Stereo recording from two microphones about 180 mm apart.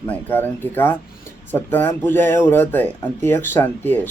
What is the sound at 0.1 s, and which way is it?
Speech, 10° left (ahead or behind).